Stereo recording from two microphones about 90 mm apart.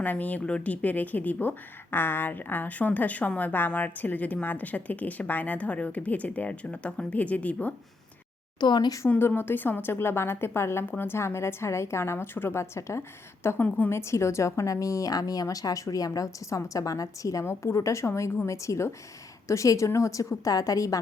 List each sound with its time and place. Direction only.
0.0 s a woman's voice: 20° left (ahead or behind)
8.6 s speech: 55° left (ahead or behind)
9.0 s a woman's voice: 25° left (ahead or behind)
13.7 s a woman's voice: 15° left (ahead or behind)
13.9 s a woman's voice: 30° left (ahead or behind)